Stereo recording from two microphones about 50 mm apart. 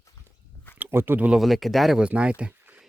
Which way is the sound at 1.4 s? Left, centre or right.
Centre.